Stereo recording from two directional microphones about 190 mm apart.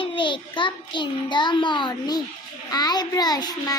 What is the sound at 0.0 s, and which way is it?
A child's voice, 25° left (ahead or behind).